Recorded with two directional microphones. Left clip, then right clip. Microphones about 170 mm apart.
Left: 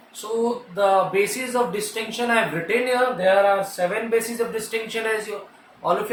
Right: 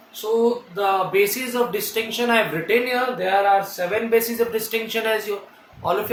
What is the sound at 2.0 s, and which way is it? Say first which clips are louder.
Speech: right 2 dB; 25° right (ahead or behind).